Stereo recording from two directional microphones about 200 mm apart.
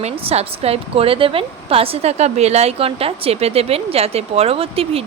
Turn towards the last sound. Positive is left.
turn(degrees=-30)  # may be behind; listen again after turning